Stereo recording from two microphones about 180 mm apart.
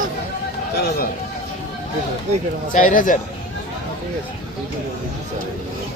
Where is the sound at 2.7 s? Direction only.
45° left (ahead or behind).